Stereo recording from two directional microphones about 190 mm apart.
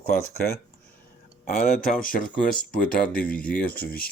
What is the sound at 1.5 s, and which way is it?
Speech, 45° left (ahead or behind).